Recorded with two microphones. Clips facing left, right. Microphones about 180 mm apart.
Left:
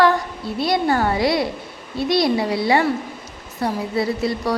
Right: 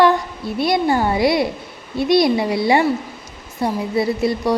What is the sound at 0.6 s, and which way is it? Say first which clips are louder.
A woman's voice: right 2 dB; 15° right (ahead or behind).